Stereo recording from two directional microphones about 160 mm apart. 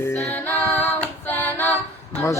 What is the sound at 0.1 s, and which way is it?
A capella, 15° left (ahead or behind).